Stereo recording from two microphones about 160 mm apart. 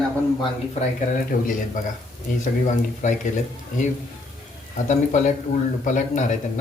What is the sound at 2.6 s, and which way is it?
Speech, 50° left (ahead or behind).